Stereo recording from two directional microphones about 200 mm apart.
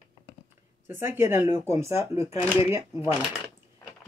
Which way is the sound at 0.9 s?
10° right (ahead or behind).